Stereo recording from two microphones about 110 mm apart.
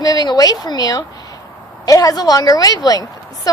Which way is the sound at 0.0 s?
35° left (ahead or behind).